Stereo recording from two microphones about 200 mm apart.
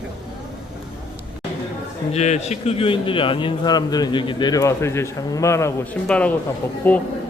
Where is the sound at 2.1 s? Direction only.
35° left (ahead or behind); by 6.3 s 5° left (ahead or behind).